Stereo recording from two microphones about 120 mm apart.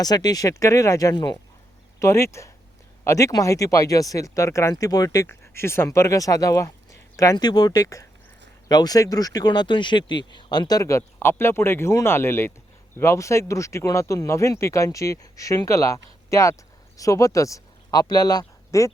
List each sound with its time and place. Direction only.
0.0 s speech: 35° left (ahead or behind)
2.0 s speech: 25° left (ahead or behind)